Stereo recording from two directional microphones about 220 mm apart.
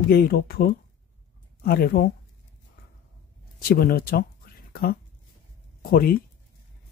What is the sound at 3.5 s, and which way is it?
Speech, 40° left (ahead or behind).